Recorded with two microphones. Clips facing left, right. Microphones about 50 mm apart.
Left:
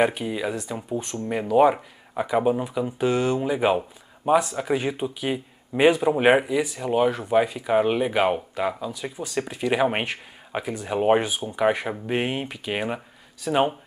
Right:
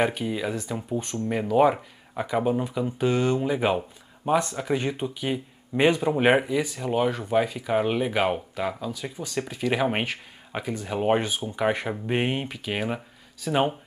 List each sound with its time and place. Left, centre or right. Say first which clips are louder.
0.0 s speech: left 2 dB; centre